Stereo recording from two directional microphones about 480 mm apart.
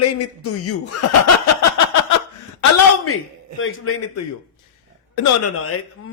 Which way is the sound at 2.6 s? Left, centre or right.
Left.